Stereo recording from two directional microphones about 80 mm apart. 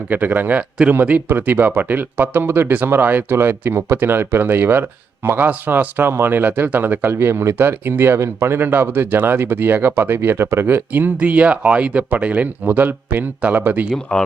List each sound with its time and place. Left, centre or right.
0.1 s speech: right
14.1 s speech: centre